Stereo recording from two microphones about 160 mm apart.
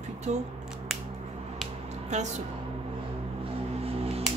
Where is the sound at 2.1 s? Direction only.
45° right (ahead or behind).